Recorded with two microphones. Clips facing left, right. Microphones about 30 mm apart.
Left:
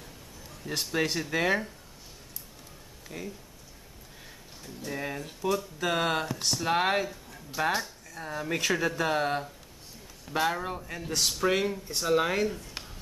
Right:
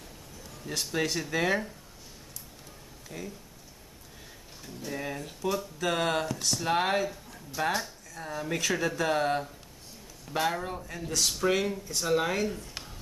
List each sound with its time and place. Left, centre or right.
0.7 s speech: centre
3.1 s speech: centre
4.8 s speech: centre
6.2 s speech: centre
6.5 s speech: centre